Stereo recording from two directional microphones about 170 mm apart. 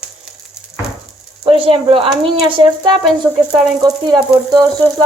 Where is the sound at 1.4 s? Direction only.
35° right (ahead or behind).